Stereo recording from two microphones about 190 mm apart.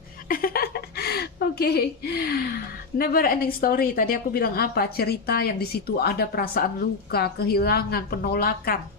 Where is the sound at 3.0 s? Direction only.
50° left (ahead or behind).